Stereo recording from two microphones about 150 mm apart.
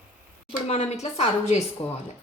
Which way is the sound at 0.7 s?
45° left (ahead or behind).